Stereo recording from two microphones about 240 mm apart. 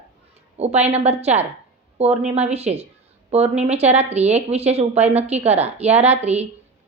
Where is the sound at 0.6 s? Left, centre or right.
Right.